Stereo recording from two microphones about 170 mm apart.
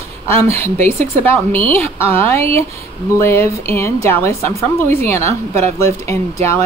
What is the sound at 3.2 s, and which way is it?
Speech, 15° left (ahead or behind).